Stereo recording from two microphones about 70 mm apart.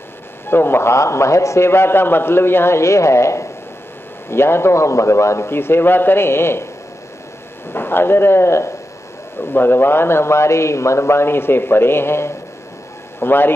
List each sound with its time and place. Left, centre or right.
0.5 s a man's voice: left
7.7 s a man's voice: left